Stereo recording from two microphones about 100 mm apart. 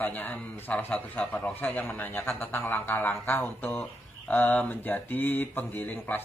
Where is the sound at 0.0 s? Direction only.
20° left (ahead or behind).